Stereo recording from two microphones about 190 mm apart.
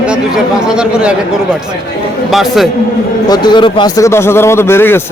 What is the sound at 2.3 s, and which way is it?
Speech, centre (ahead or behind).